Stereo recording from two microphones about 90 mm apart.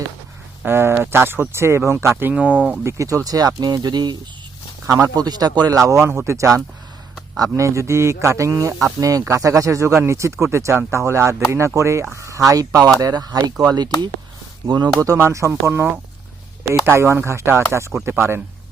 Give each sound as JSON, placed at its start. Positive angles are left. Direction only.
{"t": 0.6, "sound": "a sound", "side_deg": -25}
{"t": 1.1, "sound": "speech", "side_deg": -25}
{"t": 2.3, "sound": "speech", "side_deg": -15}
{"t": 2.8, "sound": "speech", "side_deg": -35}
{"t": 4.9, "sound": "speech", "side_deg": -40}
{"t": 15.0, "sound": "speech", "side_deg": -35}